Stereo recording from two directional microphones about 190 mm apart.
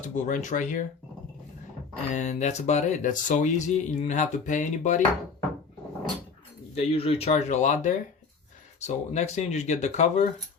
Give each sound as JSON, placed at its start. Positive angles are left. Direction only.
{"t": 0.0, "sound": "speech", "side_deg": 40}
{"t": 2.1, "sound": "speech", "side_deg": 40}
{"t": 6.7, "sound": "speech", "side_deg": 30}